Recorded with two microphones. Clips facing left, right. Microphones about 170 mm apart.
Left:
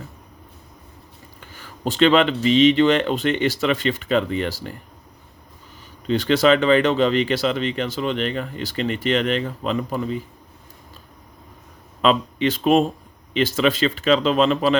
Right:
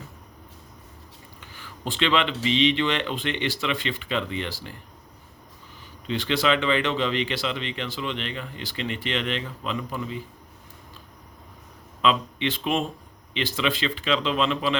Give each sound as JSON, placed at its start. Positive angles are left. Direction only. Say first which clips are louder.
{"t": 1.4, "sound": "speech", "louder": "left 6 dB", "side_deg": 45}
{"t": 6.1, "sound": "speech", "louder": "left 7 dB", "side_deg": 45}
{"t": 12.0, "sound": "speech", "louder": "left 5 dB", "side_deg": 45}